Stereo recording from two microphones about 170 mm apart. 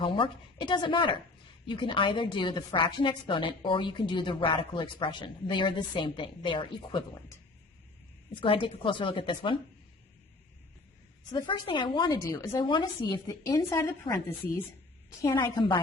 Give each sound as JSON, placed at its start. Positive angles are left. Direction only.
{"t": 0.0, "sound": "a woman's voice", "side_deg": 30}
{"t": 11.3, "sound": "a woman's voice", "side_deg": 25}